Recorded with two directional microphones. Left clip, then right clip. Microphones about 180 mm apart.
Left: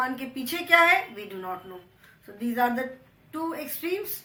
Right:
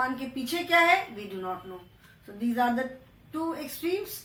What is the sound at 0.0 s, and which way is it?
Speech, 15° left (ahead or behind).